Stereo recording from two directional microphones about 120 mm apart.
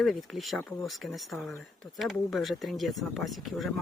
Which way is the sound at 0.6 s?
25° left (ahead or behind).